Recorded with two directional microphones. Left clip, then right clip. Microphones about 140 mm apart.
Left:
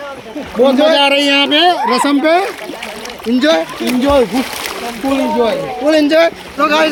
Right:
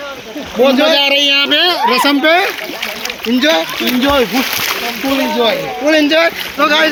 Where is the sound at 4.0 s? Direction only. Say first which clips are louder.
Left 2 dB; 10° left (ahead or behind).